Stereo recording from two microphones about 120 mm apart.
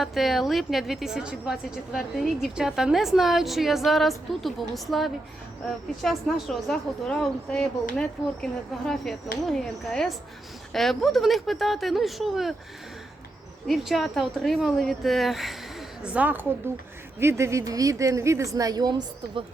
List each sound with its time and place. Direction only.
0.0 s a woman's voice: centre (ahead or behind)
13.7 s a woman's voice: centre (ahead or behind)
16.0 s a woman's voice: 10° right (ahead or behind); by 19.5 s 40° right (ahead or behind)